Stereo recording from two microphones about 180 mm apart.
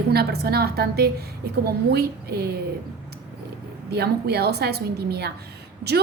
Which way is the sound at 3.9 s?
65° right (ahead or behind).